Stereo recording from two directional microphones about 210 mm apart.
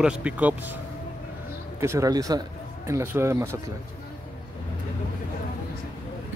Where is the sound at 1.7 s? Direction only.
15° right (ahead or behind).